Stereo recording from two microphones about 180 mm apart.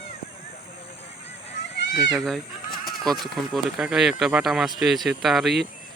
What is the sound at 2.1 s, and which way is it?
Speech, centre (ahead or behind).